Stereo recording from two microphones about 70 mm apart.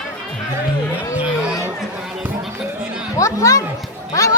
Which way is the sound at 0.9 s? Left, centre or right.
Right.